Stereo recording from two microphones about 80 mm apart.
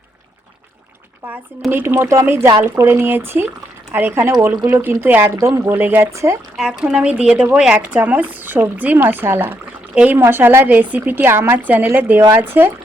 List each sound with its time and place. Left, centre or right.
1.7 s a woman's voice: right
6.1 s a woman's voice: right
6.6 s a woman's voice: centre; by 9.6 s right
9.9 s speech: centre
10.2 s a woman's voice: right